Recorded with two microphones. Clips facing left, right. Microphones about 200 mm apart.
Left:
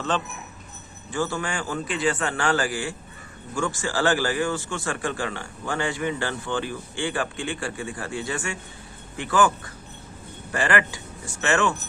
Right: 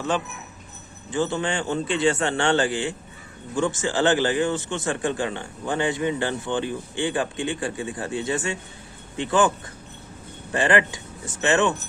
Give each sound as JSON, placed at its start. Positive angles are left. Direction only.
{"t": 1.1, "sound": "speech", "side_deg": -20}
{"t": 10.5, "sound": "speech", "side_deg": -20}